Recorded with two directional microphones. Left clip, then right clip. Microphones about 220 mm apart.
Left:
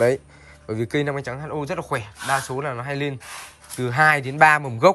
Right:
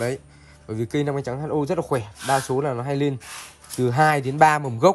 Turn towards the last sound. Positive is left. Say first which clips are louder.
# left 1 dB
turn(degrees=-20)  # may be behind; listen again after turning